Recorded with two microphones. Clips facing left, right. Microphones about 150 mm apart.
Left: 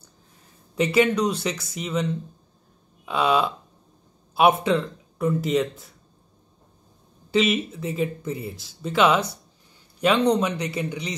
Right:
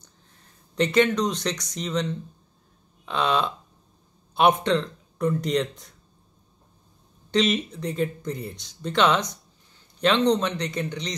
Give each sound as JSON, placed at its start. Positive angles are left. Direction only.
{"t": 0.7, "sound": "speech", "side_deg": 10}
{"t": 3.1, "sound": "speech", "side_deg": 10}
{"t": 7.2, "sound": "speech", "side_deg": 5}